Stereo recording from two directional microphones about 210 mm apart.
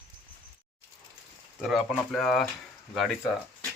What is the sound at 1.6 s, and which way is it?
Speech, centre (ahead or behind).